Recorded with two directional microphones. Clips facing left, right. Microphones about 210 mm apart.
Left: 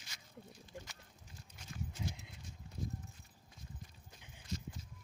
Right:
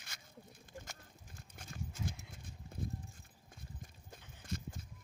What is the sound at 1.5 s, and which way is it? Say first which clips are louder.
Horse: even; 50° right (ahead or behind).